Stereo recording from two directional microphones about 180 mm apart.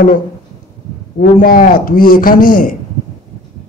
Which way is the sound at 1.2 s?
55° left (ahead or behind).